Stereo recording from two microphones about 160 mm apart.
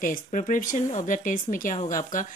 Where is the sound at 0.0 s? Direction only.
55° left (ahead or behind).